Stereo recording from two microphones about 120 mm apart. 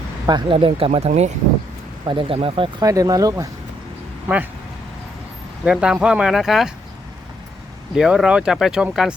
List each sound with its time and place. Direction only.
0.3 s speech: 40° right (ahead or behind)
0.9 s speech: 65° right (ahead or behind)
2.0 s speech: 45° right (ahead or behind)
2.8 s speech: 30° right (ahead or behind)
5.6 s speech: 5° right (ahead or behind)
7.9 s speech: 5° right (ahead or behind)